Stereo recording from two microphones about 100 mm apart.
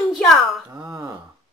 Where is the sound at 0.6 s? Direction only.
35° right (ahead or behind).